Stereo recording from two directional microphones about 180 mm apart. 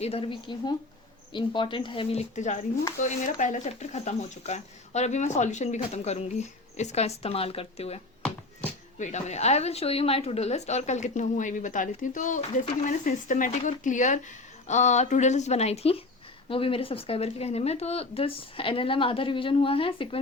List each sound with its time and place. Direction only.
0.0 s speech: 30° left (ahead or behind)
2.3 s speech: 40° left (ahead or behind)
9.0 s speech: 40° left (ahead or behind)